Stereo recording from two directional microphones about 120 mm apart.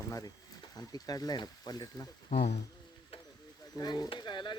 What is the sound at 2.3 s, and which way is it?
Speech, 80° left.